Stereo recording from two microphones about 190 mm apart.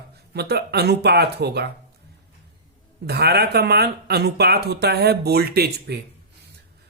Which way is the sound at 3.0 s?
60° right (ahead or behind).